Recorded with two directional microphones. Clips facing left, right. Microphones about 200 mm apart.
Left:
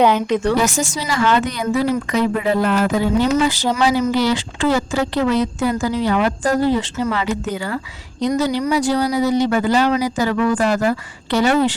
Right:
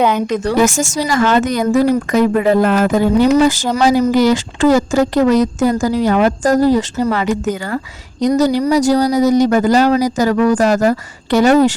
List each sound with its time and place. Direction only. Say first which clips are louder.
0.4 s speech: right 4 dB; 45° right (ahead or behind)